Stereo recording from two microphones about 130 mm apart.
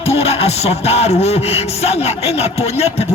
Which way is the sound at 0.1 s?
50° left (ahead or behind).